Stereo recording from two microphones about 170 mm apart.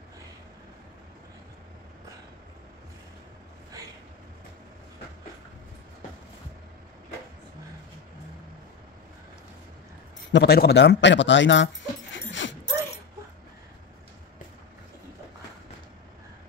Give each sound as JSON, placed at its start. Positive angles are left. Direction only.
{"t": 10.3, "sound": "speech", "side_deg": 70}